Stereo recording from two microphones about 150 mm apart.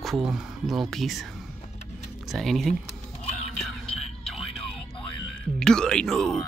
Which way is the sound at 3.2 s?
5° left (ahead or behind).